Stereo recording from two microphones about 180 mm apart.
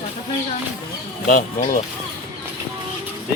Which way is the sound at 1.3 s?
50° left (ahead or behind).